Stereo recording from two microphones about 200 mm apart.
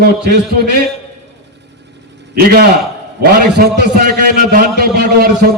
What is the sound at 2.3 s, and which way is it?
A man's voice, 50° right (ahead or behind).